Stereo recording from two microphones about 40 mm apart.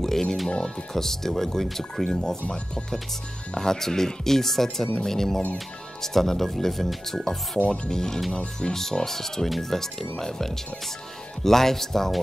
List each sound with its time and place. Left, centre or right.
0.0 s music: centre
0.9 s speech: centre
2.0 s speech: left
3.5 s speech: centre
7.6 s speech: left
7.9 s speech: centre